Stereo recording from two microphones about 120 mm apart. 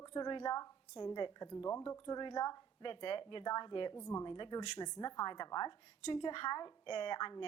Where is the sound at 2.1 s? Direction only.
40° left (ahead or behind).